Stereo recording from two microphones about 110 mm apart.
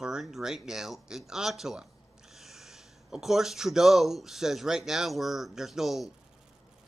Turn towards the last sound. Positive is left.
turn(degrees=-5)  # may be behind; listen again after turning